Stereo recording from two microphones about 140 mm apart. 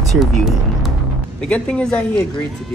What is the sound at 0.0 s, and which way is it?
Music, centre (ahead or behind).